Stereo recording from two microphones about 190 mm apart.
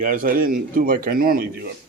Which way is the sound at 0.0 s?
45° right (ahead or behind).